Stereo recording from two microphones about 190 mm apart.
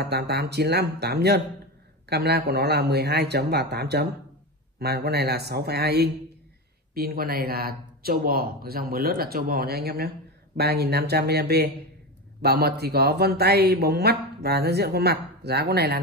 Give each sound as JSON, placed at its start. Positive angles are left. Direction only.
{"t": 0.0, "sound": "a man's voice", "side_deg": -60}